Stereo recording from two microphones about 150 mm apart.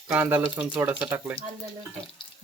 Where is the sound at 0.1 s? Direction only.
10° right (ahead or behind).